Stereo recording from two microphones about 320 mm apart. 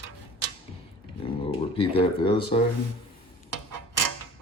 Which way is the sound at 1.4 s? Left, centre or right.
Centre.